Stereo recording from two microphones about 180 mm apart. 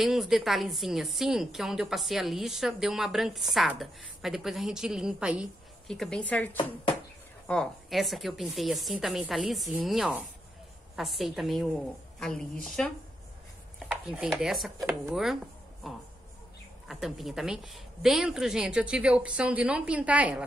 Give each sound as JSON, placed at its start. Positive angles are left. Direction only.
{"t": 0.0, "sound": "a woman's voice", "side_deg": 0}
{"t": 13.7, "sound": "chopping", "side_deg": -5}
{"t": 15.8, "sound": "a woman's voice", "side_deg": 0}